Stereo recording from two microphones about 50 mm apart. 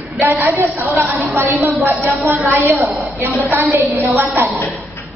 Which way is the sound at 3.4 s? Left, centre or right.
Right.